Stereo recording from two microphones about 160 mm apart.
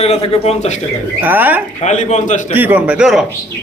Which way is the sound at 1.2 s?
10° right (ahead or behind).